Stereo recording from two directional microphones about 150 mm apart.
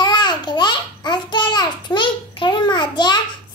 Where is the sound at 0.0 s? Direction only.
30° left (ahead or behind).